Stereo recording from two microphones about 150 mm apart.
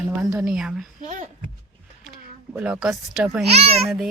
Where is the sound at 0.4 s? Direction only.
5° right (ahead or behind).